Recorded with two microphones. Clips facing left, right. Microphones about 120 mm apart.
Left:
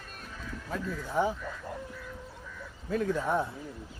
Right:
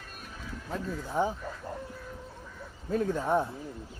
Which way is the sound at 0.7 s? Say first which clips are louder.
Even; 30° right (ahead or behind).